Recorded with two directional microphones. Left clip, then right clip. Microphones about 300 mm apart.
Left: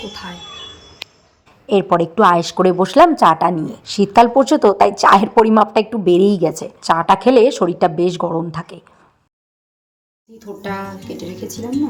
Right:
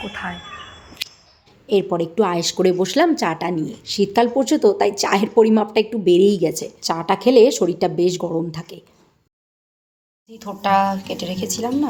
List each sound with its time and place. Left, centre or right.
0.1 s speech: centre
1.5 s speech: centre
10.3 s speech: centre